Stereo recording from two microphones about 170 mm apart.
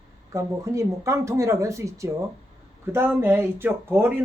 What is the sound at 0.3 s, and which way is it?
Speech, 15° right (ahead or behind).